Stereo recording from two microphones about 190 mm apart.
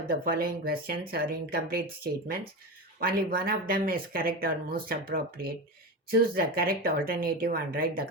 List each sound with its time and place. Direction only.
0.1 s speech: 50° right (ahead or behind)